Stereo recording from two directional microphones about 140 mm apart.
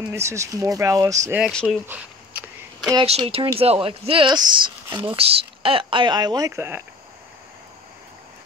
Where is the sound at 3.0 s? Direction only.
45° right (ahead or behind); by 6.5 s 30° right (ahead or behind).